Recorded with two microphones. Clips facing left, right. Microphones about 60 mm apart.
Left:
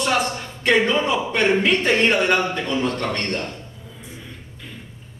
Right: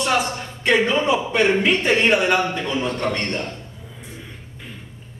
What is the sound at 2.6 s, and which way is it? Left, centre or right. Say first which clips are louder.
Speech: even; right.